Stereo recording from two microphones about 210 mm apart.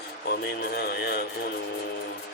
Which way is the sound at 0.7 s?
50° left (ahead or behind).